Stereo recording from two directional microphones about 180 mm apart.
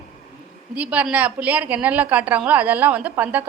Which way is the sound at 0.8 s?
5° right (ahead or behind).